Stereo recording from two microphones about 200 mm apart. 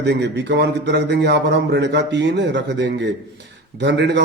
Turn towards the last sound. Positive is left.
turn(degrees=-60)  # may be behind; listen again after turning